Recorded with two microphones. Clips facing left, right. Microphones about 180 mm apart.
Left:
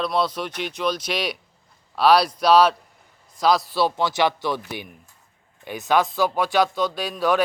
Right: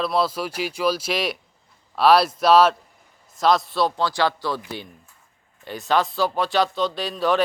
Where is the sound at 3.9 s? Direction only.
20° left (ahead or behind).